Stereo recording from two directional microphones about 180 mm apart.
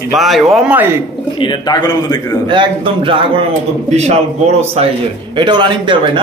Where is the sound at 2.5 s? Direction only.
30° right (ahead or behind).